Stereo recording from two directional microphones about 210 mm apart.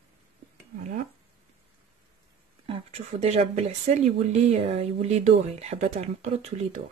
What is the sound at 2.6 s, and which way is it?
Speech, 30° right (ahead or behind).